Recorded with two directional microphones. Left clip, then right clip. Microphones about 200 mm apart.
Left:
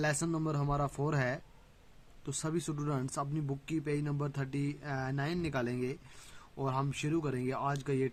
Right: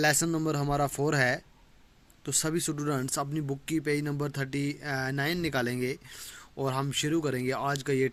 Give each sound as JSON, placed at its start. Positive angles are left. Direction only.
{"t": 0.0, "sound": "speech", "side_deg": -20}